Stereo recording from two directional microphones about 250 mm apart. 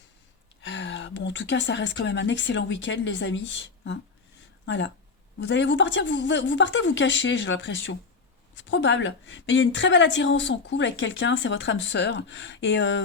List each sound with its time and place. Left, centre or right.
0.6 s a woman's voice: left